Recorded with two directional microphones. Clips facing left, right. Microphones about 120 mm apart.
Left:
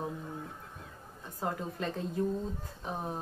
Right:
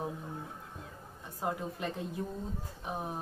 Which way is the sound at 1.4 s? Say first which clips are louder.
Even; 15° right (ahead or behind).